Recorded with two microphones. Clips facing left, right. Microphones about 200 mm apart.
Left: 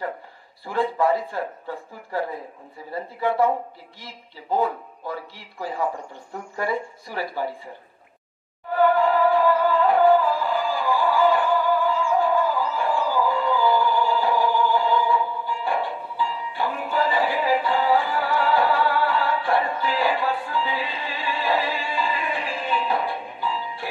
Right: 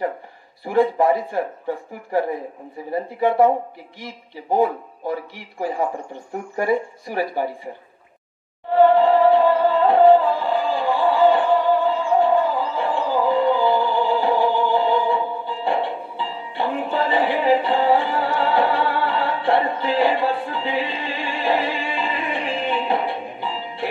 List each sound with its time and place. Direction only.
0.7 s a man's voice: 20° right (ahead or behind)
2.9 s a man's voice: 20° right (ahead or behind)
8.7 s music: 25° right (ahead or behind)